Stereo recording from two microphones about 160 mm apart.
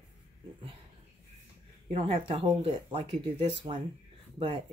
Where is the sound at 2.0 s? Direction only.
40° right (ahead or behind).